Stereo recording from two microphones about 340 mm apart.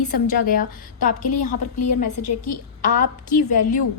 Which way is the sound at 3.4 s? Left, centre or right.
Left.